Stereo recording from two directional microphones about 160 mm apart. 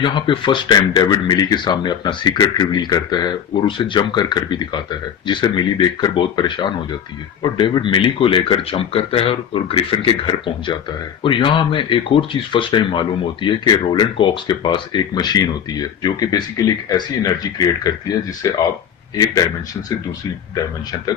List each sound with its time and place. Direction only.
0.0 s speech: 30° left (ahead or behind)
18.4 s speech: 20° left (ahead or behind)